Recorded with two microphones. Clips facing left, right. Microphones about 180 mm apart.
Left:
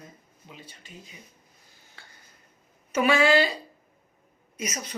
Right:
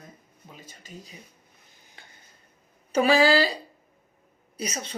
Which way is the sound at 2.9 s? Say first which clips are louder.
Right 1 dB; 35° right (ahead or behind).